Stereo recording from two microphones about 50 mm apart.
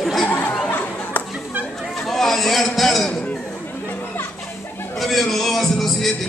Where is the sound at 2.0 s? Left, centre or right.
Centre.